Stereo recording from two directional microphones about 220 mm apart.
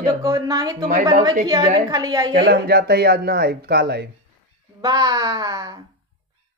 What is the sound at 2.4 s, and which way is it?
Speech, 45° right (ahead or behind).